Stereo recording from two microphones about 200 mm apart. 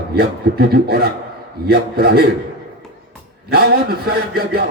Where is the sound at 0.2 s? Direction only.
50° right (ahead or behind).